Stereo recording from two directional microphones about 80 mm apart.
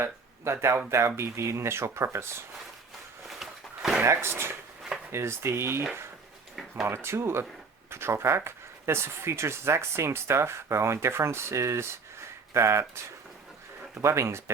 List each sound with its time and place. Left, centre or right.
0.0 s speech: right
3.2 s a sound: centre
4.0 s speech: right
6.8 s speech: right
13.9 s speech: right